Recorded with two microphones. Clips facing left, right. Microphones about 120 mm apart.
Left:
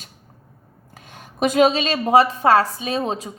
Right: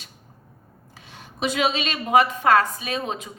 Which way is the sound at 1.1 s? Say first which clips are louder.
Left 7 dB; 45° left (ahead or behind).